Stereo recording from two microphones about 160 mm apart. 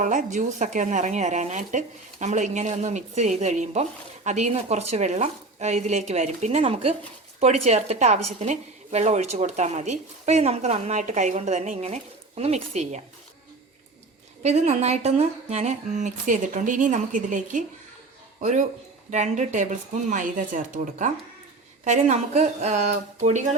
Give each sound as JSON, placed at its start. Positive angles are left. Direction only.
{"t": 0.0, "sound": "speech", "side_deg": -50}
{"t": 14.4, "sound": "speech", "side_deg": -45}